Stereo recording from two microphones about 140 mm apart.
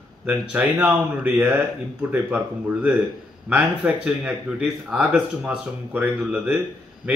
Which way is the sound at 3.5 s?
10° right (ahead or behind).